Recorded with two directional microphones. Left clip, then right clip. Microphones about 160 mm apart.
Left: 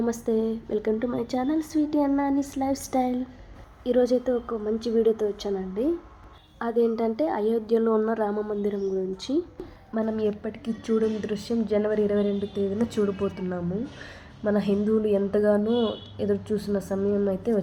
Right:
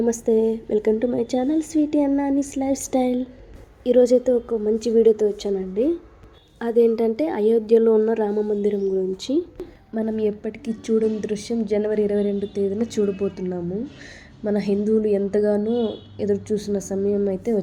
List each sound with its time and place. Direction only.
0.0 s a woman's voice: 10° right (ahead or behind)